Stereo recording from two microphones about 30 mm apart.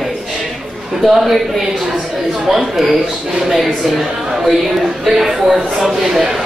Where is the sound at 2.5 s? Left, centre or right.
Centre.